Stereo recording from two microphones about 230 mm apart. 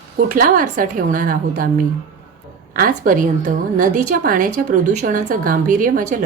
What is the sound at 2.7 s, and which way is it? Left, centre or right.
A woman's voice, right.